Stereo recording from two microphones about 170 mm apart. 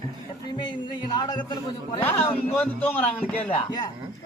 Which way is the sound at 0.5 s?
25° left (ahead or behind).